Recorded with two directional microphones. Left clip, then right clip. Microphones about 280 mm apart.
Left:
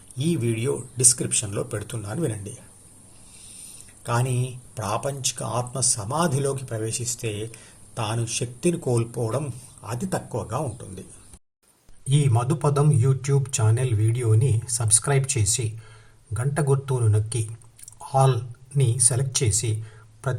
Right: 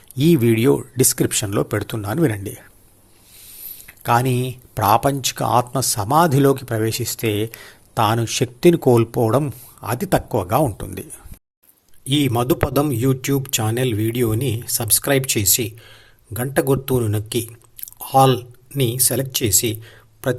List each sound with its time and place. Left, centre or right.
0.2 s speech: right
3.7 s speech: right
12.0 s speech: right